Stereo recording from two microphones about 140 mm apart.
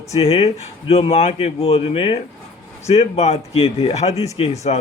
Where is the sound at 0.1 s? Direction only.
50° left (ahead or behind).